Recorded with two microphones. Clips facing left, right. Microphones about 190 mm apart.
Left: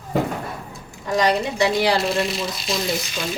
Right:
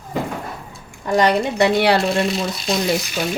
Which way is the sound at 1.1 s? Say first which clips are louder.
Right 3 dB; 55° right (ahead or behind).